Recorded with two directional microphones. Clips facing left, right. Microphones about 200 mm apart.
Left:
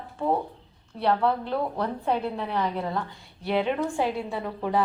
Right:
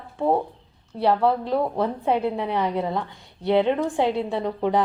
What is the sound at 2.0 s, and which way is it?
A woman's voice, 20° right (ahead or behind).